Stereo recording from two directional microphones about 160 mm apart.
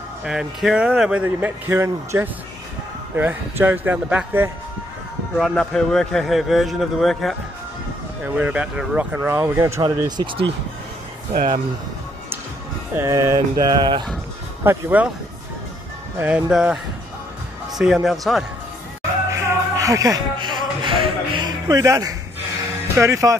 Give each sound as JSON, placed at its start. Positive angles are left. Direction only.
{"t": 0.2, "sound": "speech", "side_deg": -5}
{"t": 5.4, "sound": "a man's voice", "side_deg": 5}
{"t": 10.0, "sound": "speech", "side_deg": -30}
{"t": 11.3, "sound": "speech", "side_deg": -55}
{"t": 12.9, "sound": "speech", "side_deg": -15}
{"t": 14.6, "sound": "speech", "side_deg": -10}
{"t": 16.2, "sound": "a man's voice", "side_deg": -10}
{"t": 19.3, "sound": "music", "side_deg": -20}
{"t": 22.9, "sound": "speech", "side_deg": -20}